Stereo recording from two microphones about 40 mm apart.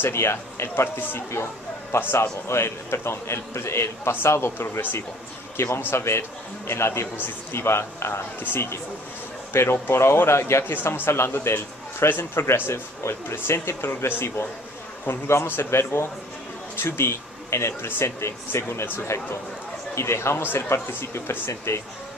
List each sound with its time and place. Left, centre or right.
0.0 s a man's voice: left
2.4 s a man's voice: left